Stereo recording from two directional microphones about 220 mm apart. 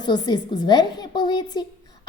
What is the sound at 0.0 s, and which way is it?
A woman's voice, 20° left (ahead or behind).